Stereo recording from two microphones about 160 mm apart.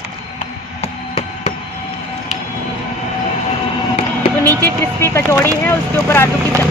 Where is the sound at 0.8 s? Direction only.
40° left (ahead or behind).